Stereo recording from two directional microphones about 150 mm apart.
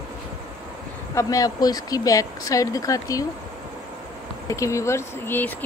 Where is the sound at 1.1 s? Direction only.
25° left (ahead or behind).